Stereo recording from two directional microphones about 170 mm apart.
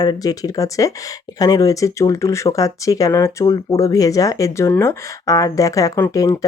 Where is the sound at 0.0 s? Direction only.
25° left (ahead or behind).